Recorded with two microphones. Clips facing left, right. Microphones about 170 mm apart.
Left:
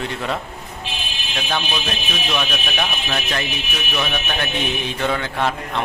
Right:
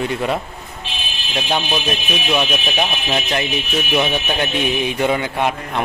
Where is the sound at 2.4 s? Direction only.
20° right (ahead or behind).